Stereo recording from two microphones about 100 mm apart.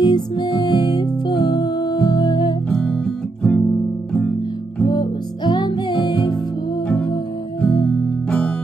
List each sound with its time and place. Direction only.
0.0 s music: 45° left (ahead or behind)
2.7 s music: 10° left (ahead or behind)
4.8 s music: 45° left (ahead or behind)
7.6 s music: 10° left (ahead or behind)